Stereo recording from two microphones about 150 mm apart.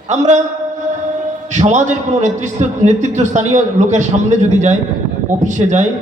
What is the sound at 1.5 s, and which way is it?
A man's voice, 50° right (ahead or behind).